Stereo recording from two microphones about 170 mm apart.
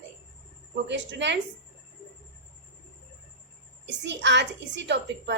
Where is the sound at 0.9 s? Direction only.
90° right.